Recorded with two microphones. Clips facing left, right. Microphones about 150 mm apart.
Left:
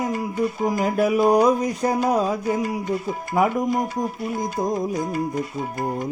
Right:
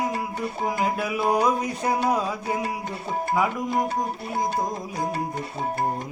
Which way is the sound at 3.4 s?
50° left (ahead or behind).